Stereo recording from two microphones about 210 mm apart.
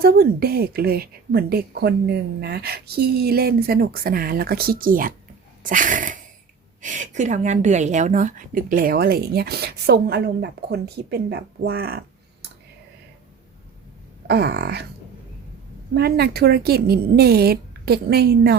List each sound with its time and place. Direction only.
0.0 s a woman's voice: 45° right (ahead or behind)
5.6 s a sound: 40° right (ahead or behind)
6.8 s a woman's voice: 35° right (ahead or behind)
14.3 s a woman's voice: 50° right (ahead or behind)
16.0 s a woman's voice: 50° right (ahead or behind)